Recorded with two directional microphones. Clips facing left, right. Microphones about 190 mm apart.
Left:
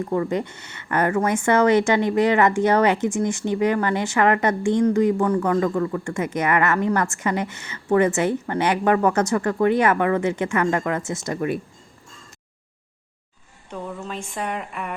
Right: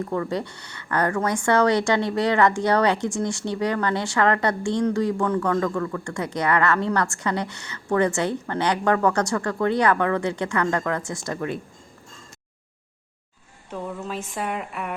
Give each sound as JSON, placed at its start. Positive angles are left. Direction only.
{"t": 0.0, "sound": "speech", "side_deg": 20}
{"t": 13.7, "sound": "speech", "side_deg": -5}